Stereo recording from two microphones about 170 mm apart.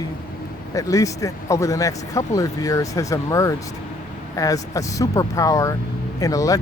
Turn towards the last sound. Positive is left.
turn(degrees=20)  # may be behind; listen again after turning